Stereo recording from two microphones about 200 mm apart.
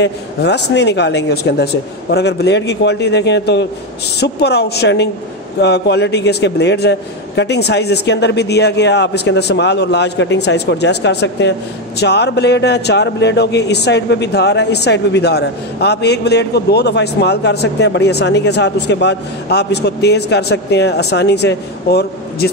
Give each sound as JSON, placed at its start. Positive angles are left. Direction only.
{"t": 0.0, "sound": "speech", "side_deg": 55}